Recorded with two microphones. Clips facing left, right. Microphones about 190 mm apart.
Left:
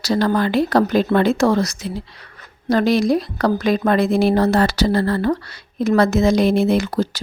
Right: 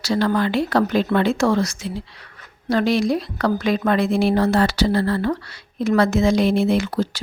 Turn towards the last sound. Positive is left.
turn(degrees=40)  # may be behind; listen again after turning